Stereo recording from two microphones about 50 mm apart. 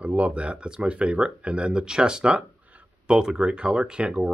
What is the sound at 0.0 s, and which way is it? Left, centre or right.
Speech, right.